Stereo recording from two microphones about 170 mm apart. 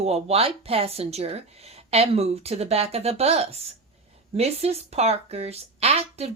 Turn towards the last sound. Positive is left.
turn(degrees=-40)  # may be behind; listen again after turning